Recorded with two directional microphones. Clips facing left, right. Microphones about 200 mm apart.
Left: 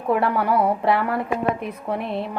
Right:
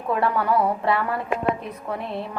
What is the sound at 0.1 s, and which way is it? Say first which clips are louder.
Speech: left 2 dB; 15° left (ahead or behind).